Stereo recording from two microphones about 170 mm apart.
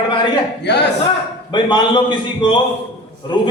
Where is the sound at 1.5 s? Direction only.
25° left (ahead or behind).